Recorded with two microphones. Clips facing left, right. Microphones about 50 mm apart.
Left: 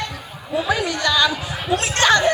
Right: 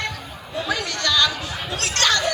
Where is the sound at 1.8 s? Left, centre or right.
Left.